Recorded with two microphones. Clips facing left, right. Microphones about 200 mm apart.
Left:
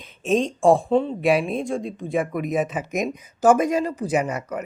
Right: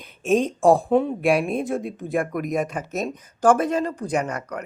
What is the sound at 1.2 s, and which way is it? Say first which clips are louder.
Speech: even; centre (ahead or behind).